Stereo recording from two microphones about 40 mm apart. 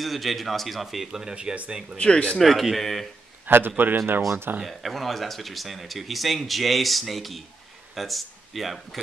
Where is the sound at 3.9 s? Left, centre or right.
Right.